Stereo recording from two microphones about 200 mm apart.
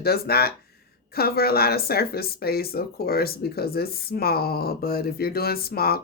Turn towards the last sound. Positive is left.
turn(degrees=50)  # may be behind; listen again after turning